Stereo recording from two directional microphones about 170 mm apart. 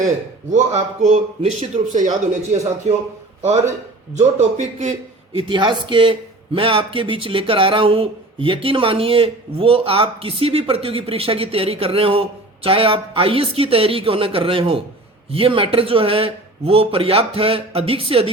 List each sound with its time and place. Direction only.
0.5 s a man's voice: 40° right (ahead or behind)
4.2 s a man's voice: 45° right (ahead or behind)
5.3 s a man's voice: 30° right (ahead or behind)